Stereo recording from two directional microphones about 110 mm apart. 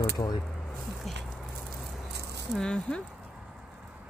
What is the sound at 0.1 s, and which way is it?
Speech, 35° left (ahead or behind).